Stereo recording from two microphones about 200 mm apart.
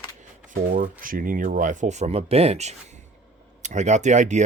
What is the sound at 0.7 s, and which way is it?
Speech, 45° right (ahead or behind).